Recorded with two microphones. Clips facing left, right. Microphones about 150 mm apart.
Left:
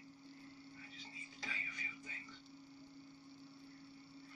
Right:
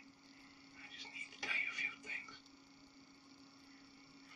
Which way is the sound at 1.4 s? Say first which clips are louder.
Even; 85° right.